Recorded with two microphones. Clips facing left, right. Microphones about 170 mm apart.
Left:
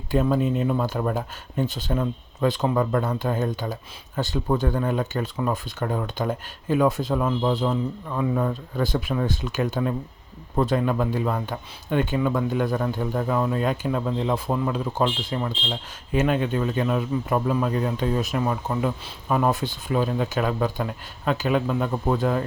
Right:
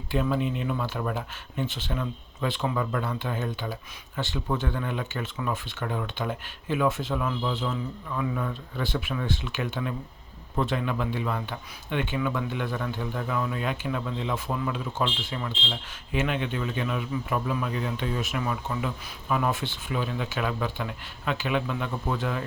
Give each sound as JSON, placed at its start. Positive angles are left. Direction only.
{"t": 0.1, "sound": "speech", "side_deg": 40}